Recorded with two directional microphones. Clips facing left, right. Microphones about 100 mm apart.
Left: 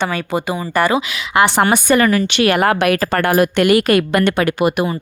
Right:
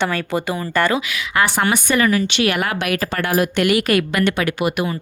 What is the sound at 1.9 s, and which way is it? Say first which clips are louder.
Speech: left 3 dB; 50° left (ahead or behind).